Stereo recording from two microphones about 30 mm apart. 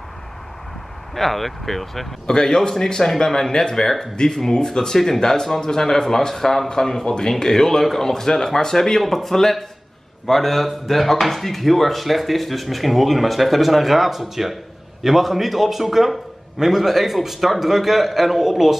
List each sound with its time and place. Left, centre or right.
1.1 s speech: centre
2.2 s speech: left; by 18.8 s centre